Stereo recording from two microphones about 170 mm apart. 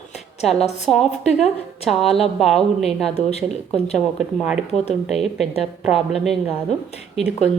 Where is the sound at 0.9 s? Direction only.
5° left (ahead or behind).